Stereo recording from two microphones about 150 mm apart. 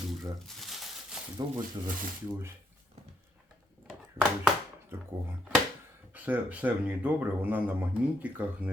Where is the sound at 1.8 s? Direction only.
30° right (ahead or behind).